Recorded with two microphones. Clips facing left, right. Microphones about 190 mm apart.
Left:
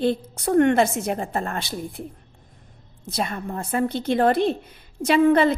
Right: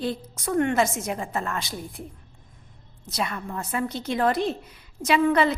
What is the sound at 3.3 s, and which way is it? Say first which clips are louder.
Speech: left 3 dB; 35° left (ahead or behind).